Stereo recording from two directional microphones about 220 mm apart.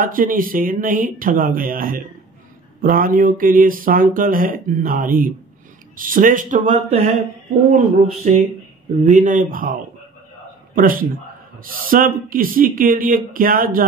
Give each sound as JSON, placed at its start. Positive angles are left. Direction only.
{"t": 0.0, "sound": "speech", "side_deg": -40}
{"t": 8.3, "sound": "a man's voice", "side_deg": -35}